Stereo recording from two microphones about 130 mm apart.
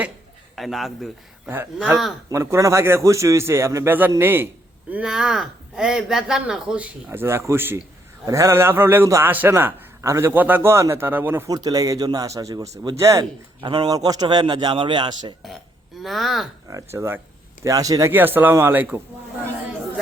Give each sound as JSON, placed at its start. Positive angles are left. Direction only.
{"t": 0.5, "sound": "speech", "side_deg": 0}
{"t": 1.5, "sound": "a man's voice", "side_deg": -15}
{"t": 2.3, "sound": "a man's voice", "side_deg": -20}
{"t": 11.4, "sound": "a man's voice", "side_deg": -30}
{"t": 13.6, "sound": "a man's voice", "side_deg": -35}
{"t": 16.0, "sound": "speech", "side_deg": 0}
{"t": 16.6, "sound": "a man's voice", "side_deg": -25}
{"t": 18.1, "sound": "a man's voice", "side_deg": -15}